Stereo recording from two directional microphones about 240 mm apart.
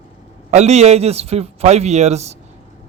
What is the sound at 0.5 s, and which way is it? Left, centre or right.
Speech, right.